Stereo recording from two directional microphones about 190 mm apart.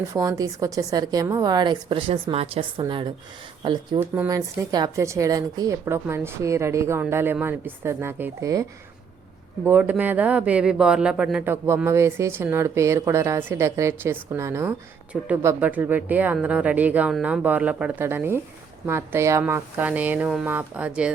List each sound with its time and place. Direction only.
0.1 s a woman's voice: 20° right (ahead or behind)
9.6 s speech: 10° right (ahead or behind)